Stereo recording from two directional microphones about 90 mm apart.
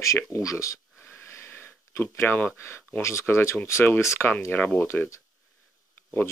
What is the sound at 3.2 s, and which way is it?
Speech, 30° left (ahead or behind).